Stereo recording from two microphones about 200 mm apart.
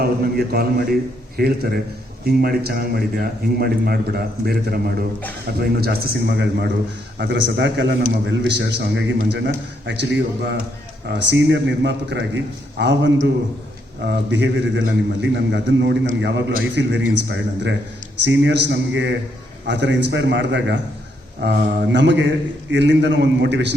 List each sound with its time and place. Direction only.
0.0 s a man's voice: 50° right (ahead or behind)